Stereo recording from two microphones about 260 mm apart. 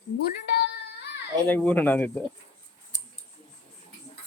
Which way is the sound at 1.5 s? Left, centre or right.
Centre.